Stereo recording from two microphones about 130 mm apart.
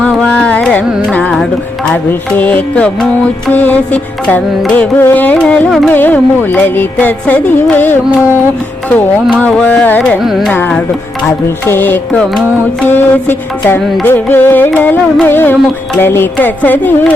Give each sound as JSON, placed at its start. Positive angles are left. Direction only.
{"t": 0.0, "sound": "carnatic music", "side_deg": 10}
{"t": 1.1, "sound": "classical music", "side_deg": 5}
{"t": 1.9, "sound": "music", "side_deg": 10}
{"t": 9.4, "sound": "music", "side_deg": 5}
{"t": 10.0, "sound": "classical music", "side_deg": 0}
{"t": 10.5, "sound": "music", "side_deg": 15}